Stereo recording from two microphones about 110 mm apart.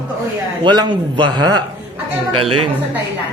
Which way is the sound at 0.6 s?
45° right (ahead or behind).